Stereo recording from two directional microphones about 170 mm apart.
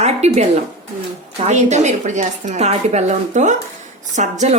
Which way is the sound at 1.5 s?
45° right (ahead or behind).